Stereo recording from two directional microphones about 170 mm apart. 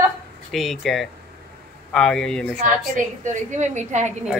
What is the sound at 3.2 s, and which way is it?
Speech, 45° right (ahead or behind).